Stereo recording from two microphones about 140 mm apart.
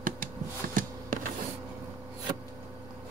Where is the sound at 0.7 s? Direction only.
70° right (ahead or behind).